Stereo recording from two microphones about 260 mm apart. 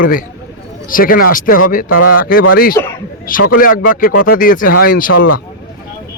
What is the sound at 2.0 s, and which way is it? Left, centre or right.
Speech, left.